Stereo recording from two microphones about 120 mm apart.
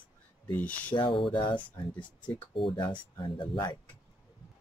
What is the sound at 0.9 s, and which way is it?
Speech, 45° left (ahead or behind).